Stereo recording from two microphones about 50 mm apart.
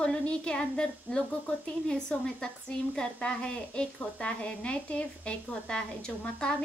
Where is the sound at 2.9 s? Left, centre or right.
Centre.